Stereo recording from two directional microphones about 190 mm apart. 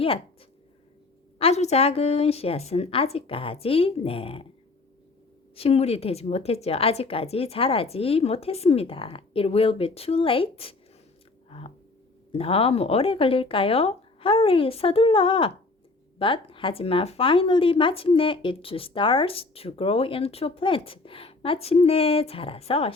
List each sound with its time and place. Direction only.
1.4 s a woman's voice: 35° left (ahead or behind)
5.5 s a woman's voice: 30° left (ahead or behind)
11.4 s a sound: 30° left (ahead or behind)
12.3 s speech: 30° left (ahead or behind)